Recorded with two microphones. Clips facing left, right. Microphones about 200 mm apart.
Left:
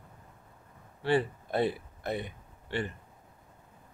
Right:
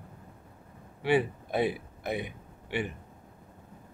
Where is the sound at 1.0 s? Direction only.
10° right (ahead or behind).